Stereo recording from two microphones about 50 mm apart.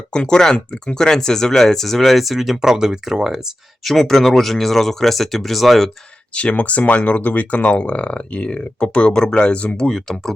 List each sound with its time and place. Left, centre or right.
0.1 s speech: centre
3.9 s speech: centre
6.3 s speech: left
9.9 s speech: centre